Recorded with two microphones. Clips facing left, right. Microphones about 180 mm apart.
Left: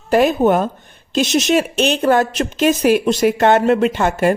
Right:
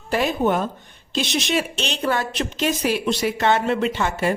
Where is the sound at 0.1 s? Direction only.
50° left (ahead or behind).